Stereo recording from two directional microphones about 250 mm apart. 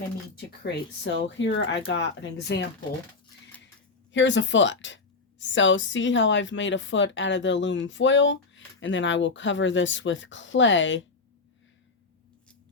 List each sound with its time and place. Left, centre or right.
0.3 s speech: left
4.1 s speech: left